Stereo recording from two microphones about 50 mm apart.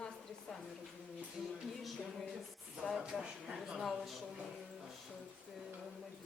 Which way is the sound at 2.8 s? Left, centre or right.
Centre.